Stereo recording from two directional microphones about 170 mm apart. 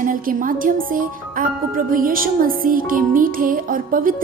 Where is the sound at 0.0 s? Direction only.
55° right (ahead or behind).